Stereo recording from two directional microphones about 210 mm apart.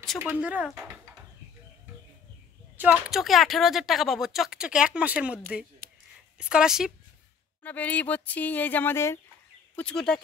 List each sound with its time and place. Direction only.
0.0 s speech: 5° right (ahead or behind)
2.8 s speech: 5° right (ahead or behind)
5.8 s a sound: 45° right (ahead or behind)
6.3 s speech: 5° right (ahead or behind)